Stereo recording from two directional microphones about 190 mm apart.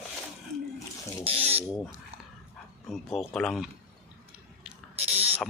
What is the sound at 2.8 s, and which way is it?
Speech, centre (ahead or behind).